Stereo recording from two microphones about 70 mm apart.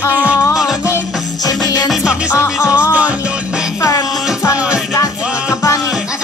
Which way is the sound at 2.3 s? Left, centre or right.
Left.